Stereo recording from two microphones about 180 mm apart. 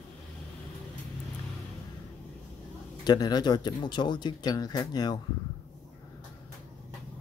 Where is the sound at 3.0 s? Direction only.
25° left (ahead or behind).